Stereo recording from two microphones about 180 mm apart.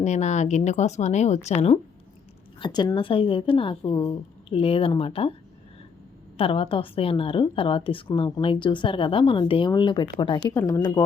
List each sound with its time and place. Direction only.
0.0 s speech: 40° left (ahead or behind)
2.6 s a woman's voice: 25° left (ahead or behind)
6.3 s a woman's voice: 30° left (ahead or behind)